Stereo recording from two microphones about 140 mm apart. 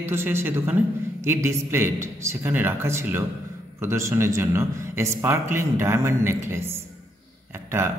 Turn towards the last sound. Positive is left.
turn(degrees=-20)  # may be behind; listen again after turning